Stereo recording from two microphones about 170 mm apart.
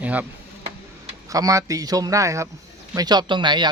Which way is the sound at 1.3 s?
20° right (ahead or behind).